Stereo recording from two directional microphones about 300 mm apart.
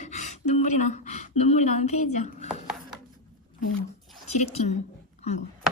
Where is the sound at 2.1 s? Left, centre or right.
Left.